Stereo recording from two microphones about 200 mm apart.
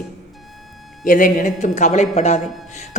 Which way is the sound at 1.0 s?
40° left (ahead or behind).